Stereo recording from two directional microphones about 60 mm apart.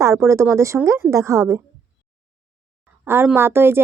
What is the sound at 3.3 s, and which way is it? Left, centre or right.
Speech, right.